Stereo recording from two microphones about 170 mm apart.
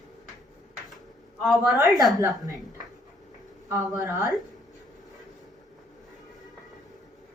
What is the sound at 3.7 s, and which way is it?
Speech, 20° right (ahead or behind).